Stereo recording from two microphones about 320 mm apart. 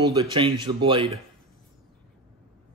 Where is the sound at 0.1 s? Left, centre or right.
Centre.